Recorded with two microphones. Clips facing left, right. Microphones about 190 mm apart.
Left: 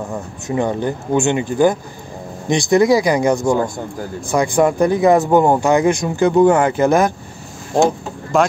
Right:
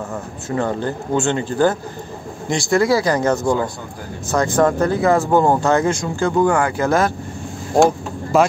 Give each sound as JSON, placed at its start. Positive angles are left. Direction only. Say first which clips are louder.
{"t": 0.1, "sound": "speech", "louder": "left 2 dB", "side_deg": 15}
{"t": 8.3, "sound": "speech", "louder": "even", "side_deg": -5}